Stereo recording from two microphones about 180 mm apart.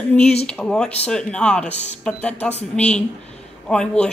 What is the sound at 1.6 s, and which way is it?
Speech, 40° left (ahead or behind).